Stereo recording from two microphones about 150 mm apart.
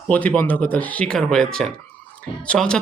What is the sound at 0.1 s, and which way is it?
A man's voice, 10° left (ahead or behind).